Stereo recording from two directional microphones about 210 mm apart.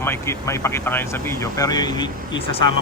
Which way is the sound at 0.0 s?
10° left (ahead or behind).